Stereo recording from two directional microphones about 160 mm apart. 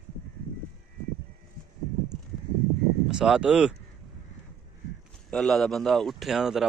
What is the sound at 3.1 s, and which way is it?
Speech, 5° right (ahead or behind).